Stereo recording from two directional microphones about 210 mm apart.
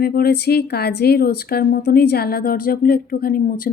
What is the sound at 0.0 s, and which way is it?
Speech, 45° left (ahead or behind).